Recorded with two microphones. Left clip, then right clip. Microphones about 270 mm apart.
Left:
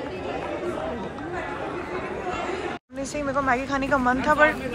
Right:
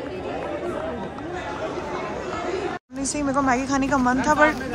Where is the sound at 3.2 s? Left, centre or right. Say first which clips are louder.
Right 2 dB; centre.